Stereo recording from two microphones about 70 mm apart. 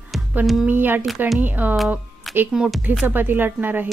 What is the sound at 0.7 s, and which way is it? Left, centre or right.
Speech, right.